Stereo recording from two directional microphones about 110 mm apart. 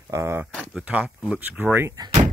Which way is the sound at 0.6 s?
10° right (ahead or behind).